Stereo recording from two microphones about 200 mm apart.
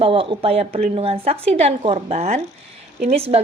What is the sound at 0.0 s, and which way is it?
A woman's voice, 25° right (ahead or behind).